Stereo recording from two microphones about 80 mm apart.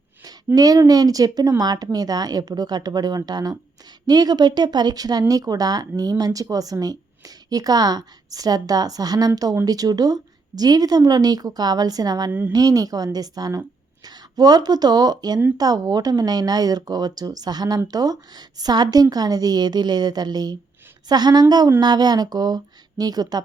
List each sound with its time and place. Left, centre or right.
0.3 s speech: right